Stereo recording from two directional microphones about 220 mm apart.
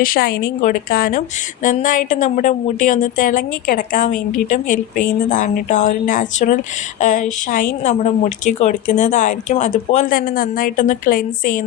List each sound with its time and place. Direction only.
0.0 s a woman's voice: 40° left (ahead or behind)